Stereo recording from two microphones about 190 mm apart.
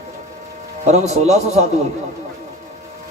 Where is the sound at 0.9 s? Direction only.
35° right (ahead or behind).